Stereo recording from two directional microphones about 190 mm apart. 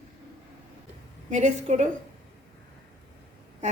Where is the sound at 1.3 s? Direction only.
40° right (ahead or behind).